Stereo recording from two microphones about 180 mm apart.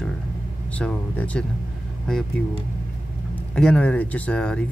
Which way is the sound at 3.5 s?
5° left (ahead or behind).